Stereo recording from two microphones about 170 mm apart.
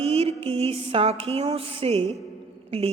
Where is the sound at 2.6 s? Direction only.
35° right (ahead or behind).